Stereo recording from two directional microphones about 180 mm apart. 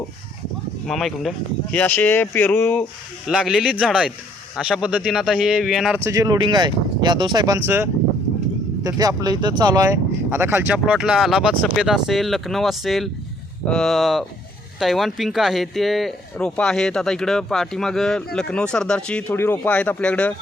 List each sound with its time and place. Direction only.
0.9 s speech: centre (ahead or behind)
3.2 s speech: centre (ahead or behind)
6.0 s speech: 15° right (ahead or behind); by 20.3 s 5° left (ahead or behind)